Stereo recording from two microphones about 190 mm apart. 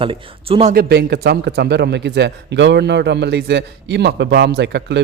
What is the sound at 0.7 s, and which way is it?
A man's voice, 55° right (ahead or behind).